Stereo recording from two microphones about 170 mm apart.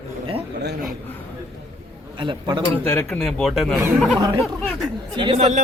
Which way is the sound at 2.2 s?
30° right (ahead or behind).